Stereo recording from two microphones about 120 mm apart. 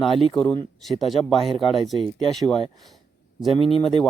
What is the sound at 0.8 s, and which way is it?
Speech, centre (ahead or behind).